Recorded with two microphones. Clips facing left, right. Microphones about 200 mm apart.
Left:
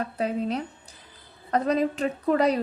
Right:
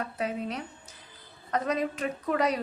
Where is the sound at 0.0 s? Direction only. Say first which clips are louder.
Left 5 dB; 30° left (ahead or behind).